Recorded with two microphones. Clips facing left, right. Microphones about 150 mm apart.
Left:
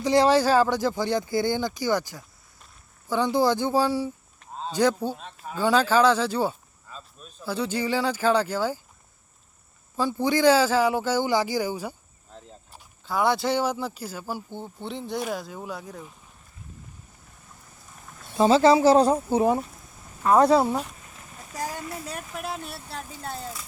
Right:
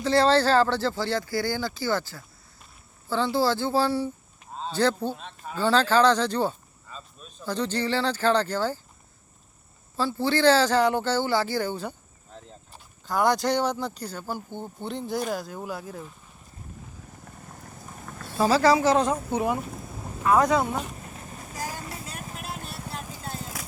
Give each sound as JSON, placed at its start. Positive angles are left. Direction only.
{"t": 0.0, "sound": "speech", "side_deg": 15}
{"t": 10.0, "sound": "speech", "side_deg": 15}
{"t": 17.2, "sound": "a sound", "side_deg": -60}
{"t": 18.3, "sound": "speech", "side_deg": 25}